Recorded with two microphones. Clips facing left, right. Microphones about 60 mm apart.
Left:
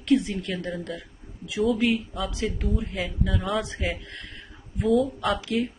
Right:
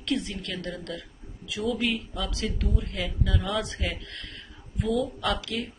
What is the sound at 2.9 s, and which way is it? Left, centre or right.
Speech, centre.